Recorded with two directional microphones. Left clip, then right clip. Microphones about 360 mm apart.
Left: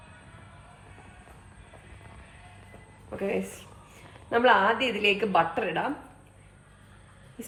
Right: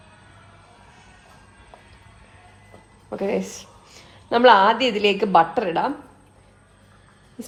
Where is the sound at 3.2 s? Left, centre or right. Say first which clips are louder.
Right 6 dB; right.